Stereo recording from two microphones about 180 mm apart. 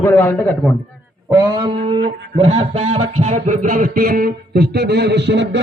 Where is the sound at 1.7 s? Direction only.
30° right (ahead or behind).